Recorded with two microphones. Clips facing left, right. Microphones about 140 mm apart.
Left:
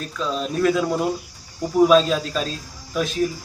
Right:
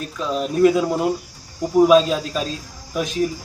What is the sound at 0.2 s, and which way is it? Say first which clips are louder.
Speech: right 5 dB; 10° right (ahead or behind).